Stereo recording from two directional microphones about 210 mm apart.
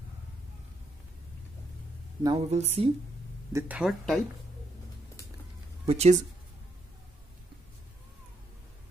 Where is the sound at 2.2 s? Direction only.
30° right (ahead or behind).